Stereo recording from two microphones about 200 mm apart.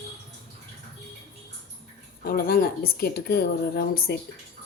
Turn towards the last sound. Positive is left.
turn(degrees=50)  # may be behind; listen again after turning